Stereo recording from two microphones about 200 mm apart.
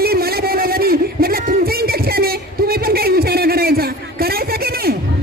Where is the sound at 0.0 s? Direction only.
50° right (ahead or behind).